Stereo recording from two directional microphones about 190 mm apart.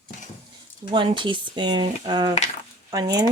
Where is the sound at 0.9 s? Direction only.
25° right (ahead or behind).